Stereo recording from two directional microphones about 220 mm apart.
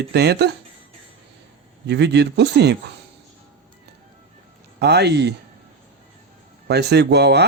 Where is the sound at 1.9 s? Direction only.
50° right (ahead or behind).